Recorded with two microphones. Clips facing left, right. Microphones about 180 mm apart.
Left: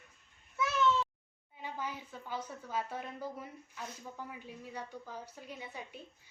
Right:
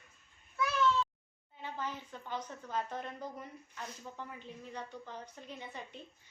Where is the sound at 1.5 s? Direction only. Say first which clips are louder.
Even; 10° left (ahead or behind).